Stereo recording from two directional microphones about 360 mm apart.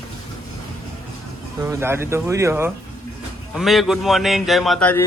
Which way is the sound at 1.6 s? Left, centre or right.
Centre.